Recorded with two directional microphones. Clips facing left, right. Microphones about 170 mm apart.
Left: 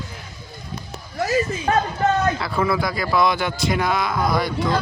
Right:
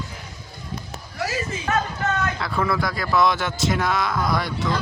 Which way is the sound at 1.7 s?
35° left (ahead or behind).